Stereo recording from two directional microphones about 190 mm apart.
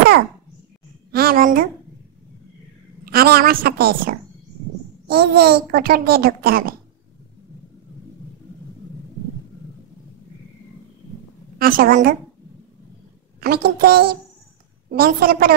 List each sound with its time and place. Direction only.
1.1 s a child's voice: 50° right (ahead or behind)
3.1 s a child's voice: 55° right (ahead or behind)
11.5 s a child's voice: 50° right (ahead or behind)
13.4 s a child's voice: 55° right (ahead or behind)